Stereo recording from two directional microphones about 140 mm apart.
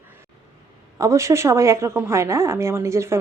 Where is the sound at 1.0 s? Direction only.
20° right (ahead or behind).